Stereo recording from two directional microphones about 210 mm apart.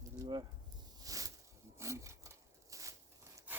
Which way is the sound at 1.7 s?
15° right (ahead or behind).